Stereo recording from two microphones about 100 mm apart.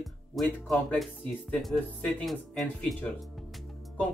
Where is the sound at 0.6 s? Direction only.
Centre (ahead or behind).